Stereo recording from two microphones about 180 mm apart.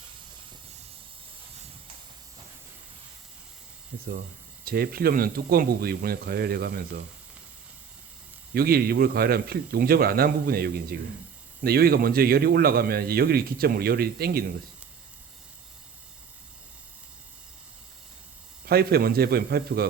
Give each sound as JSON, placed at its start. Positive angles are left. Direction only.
{"t": 4.6, "sound": "speech", "side_deg": -55}
{"t": 8.5, "sound": "speech", "side_deg": -60}
{"t": 18.6, "sound": "speech", "side_deg": -60}